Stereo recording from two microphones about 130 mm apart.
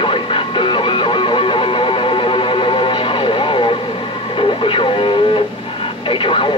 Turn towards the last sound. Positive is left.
turn(degrees=40)  # may be behind; listen again after turning